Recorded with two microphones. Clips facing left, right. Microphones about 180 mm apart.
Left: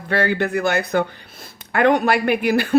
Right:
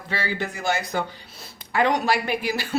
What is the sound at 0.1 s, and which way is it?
Speech, 60° left (ahead or behind).